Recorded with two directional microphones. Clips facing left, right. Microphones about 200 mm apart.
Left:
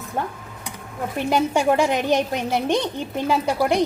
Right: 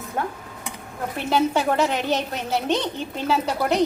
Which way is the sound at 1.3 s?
15° left (ahead or behind).